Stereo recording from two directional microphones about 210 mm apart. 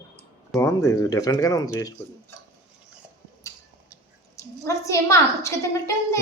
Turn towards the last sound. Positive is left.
turn(degrees=15)  # may be behind; listen again after turning